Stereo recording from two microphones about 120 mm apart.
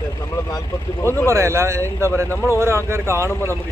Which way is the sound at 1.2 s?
25° right (ahead or behind).